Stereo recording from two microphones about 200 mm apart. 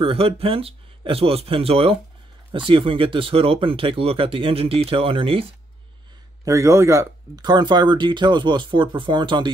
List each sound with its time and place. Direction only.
0.0 s speech: 30° right (ahead or behind)
6.4 s speech: 15° right (ahead or behind)